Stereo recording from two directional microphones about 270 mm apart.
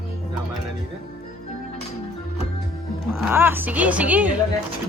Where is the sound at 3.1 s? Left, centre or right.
Centre.